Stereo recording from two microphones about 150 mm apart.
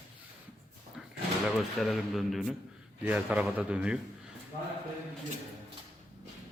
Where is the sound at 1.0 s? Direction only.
5° right (ahead or behind).